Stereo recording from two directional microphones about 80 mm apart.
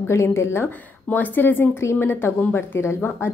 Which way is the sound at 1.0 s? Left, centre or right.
Left.